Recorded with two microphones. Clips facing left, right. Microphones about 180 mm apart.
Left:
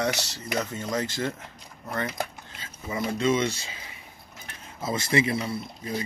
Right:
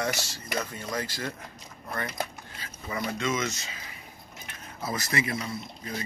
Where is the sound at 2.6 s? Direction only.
25° left (ahead or behind).